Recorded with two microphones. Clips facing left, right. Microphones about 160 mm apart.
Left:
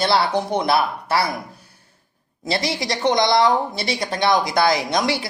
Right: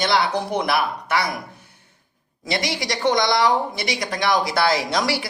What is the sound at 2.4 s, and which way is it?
Speech, 30° left (ahead or behind).